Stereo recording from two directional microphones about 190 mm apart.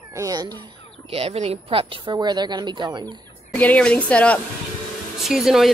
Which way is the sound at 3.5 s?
5° left (ahead or behind).